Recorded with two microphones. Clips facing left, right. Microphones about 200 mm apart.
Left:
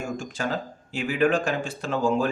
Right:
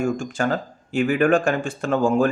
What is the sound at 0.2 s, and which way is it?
Speech, 50° right (ahead or behind).